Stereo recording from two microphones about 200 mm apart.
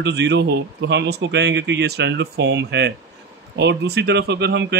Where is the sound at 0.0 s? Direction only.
60° right (ahead or behind).